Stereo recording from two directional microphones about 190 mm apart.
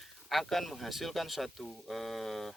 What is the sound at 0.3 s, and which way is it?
Speech, centre (ahead or behind).